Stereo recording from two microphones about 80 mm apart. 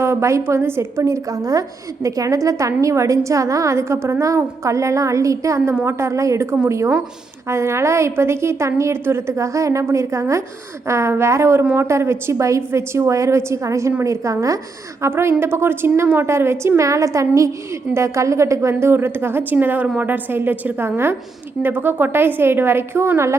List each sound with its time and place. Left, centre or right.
0.0 s a woman's voice: right
15.0 s a woman's voice: right